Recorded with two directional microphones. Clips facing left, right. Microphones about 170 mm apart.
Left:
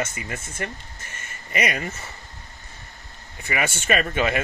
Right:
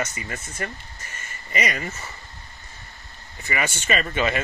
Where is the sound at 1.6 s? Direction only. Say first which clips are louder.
Left 1 dB; 55° left (ahead or behind).